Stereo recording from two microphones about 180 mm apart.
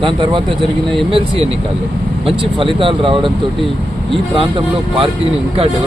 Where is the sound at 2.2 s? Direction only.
30° right (ahead or behind).